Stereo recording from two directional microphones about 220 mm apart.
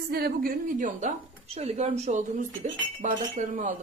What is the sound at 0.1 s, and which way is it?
A woman's voice, 45° right (ahead or behind).